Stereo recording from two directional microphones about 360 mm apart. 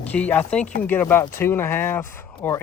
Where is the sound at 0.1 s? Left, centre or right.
Centre.